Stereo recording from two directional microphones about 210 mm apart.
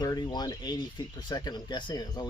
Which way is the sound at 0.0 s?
20° left (ahead or behind).